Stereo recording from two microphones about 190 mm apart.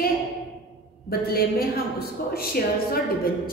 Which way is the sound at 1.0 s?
55° left (ahead or behind).